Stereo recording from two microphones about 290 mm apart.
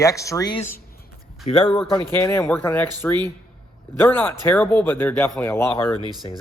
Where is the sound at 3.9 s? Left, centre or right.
Centre.